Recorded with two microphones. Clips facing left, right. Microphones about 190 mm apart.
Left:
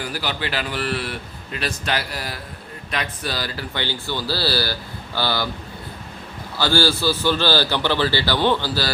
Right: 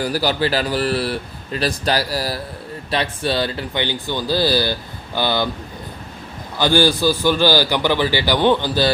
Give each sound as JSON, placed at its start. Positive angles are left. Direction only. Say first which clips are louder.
{"t": 0.0, "sound": "speech", "louder": "right 8 dB", "side_deg": -40}
{"t": 6.6, "sound": "a man's voice", "louder": "right 4 dB", "side_deg": -15}